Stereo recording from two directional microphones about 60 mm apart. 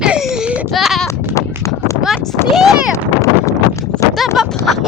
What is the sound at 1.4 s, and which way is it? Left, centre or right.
Clip-clop, left.